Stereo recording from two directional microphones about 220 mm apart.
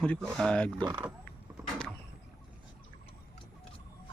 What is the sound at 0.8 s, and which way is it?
Speech, 15° right (ahead or behind).